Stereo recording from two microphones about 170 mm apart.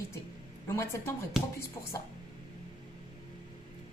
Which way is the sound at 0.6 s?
15° left (ahead or behind).